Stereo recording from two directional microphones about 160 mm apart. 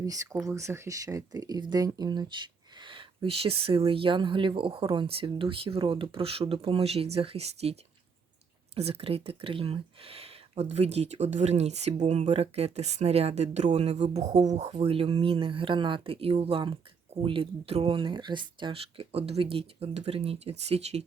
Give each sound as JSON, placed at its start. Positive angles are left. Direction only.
{"t": 0.0, "sound": "speech", "side_deg": -20}